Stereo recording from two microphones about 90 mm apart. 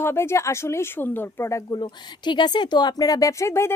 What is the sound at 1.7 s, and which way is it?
Speech, 55° left (ahead or behind).